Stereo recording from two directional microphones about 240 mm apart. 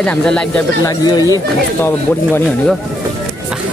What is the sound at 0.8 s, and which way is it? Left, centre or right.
Speech, centre.